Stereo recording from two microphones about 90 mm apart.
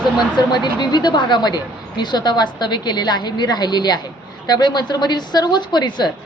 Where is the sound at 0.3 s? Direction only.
50° left (ahead or behind).